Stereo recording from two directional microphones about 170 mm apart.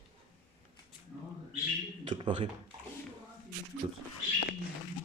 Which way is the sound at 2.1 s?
30° right (ahead or behind).